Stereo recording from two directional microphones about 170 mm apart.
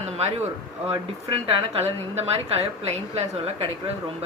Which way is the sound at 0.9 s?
35° right (ahead or behind).